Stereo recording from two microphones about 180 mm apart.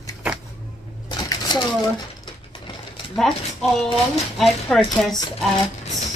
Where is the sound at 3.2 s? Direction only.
Centre (ahead or behind).